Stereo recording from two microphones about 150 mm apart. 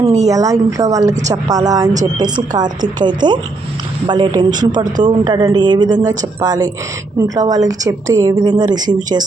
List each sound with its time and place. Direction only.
0.3 s speech: 20° right (ahead or behind)